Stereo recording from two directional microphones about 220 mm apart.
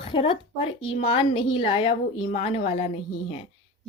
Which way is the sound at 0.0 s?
25° left (ahead or behind).